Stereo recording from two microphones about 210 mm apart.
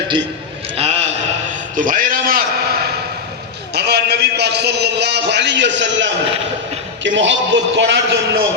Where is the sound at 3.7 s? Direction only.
50° right (ahead or behind).